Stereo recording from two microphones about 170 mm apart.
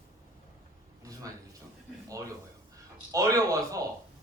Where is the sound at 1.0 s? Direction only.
20° right (ahead or behind).